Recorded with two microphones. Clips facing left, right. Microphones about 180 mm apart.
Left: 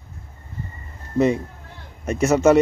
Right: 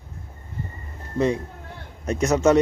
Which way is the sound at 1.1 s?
5° left (ahead or behind).